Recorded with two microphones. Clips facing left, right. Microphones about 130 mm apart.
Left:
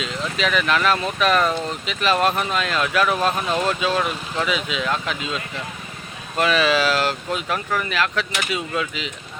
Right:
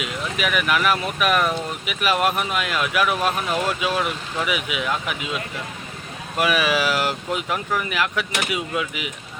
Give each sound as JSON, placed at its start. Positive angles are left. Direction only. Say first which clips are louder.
{"t": 0.0, "sound": "speech", "louder": "left 1 dB", "side_deg": -10}